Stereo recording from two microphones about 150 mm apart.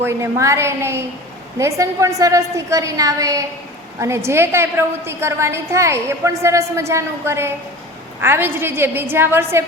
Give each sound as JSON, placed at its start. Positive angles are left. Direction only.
{"t": 0.0, "sound": "a woman's voice", "side_deg": -20}